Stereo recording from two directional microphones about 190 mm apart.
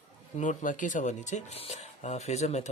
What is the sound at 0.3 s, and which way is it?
Speech, 40° left (ahead or behind).